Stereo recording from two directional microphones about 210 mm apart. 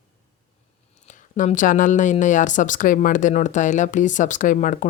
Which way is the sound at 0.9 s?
35° left (ahead or behind).